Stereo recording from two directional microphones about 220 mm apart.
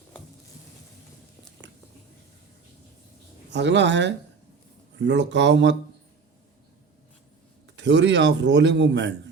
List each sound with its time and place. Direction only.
3.5 s a man's voice: 55° right (ahead or behind)
7.8 s a man's voice: 55° right (ahead or behind)